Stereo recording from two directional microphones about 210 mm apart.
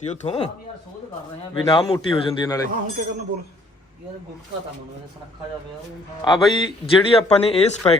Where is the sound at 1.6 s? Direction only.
20° left (ahead or behind).